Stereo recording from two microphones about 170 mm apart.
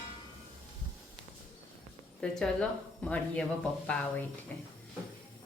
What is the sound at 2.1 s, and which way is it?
Speech, 5° left (ahead or behind).